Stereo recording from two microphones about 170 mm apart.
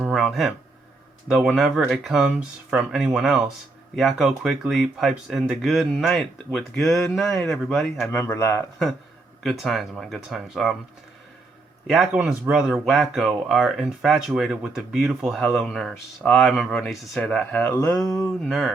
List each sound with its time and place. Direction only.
0.0 s a sound: centre (ahead or behind)
1.3 s speech: centre (ahead or behind)
8.1 s speech: 15° left (ahead or behind)
9.4 s speech: centre (ahead or behind)
11.9 s speech: 5° right (ahead or behind); by 18.3 s 20° left (ahead or behind)
18.4 s speech: centre (ahead or behind)